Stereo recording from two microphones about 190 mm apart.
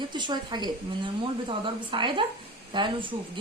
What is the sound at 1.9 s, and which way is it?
Speech, 25° right (ahead or behind).